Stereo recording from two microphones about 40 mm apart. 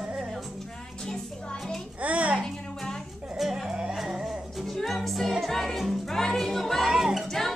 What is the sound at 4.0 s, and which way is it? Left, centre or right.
Music, centre.